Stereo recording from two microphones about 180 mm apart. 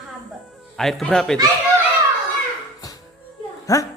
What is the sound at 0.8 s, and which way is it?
Speech, centre (ahead or behind).